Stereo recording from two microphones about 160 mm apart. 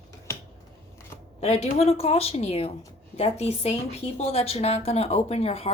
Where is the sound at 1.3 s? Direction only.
40° left (ahead or behind).